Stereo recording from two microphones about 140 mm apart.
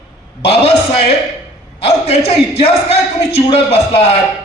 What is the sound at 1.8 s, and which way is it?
A man's voice, 50° left (ahead or behind).